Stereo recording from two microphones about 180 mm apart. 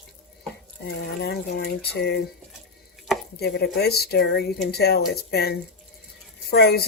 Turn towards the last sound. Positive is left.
turn(degrees=60)  # may be behind; listen again after turning